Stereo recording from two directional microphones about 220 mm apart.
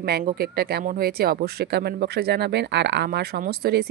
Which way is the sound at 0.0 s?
45° right (ahead or behind).